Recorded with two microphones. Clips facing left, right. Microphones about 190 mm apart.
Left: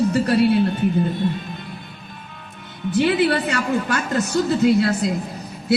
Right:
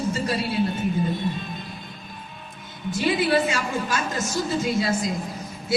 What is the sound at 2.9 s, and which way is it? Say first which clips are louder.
A man's voice: left 4 dB; 65° left (ahead or behind).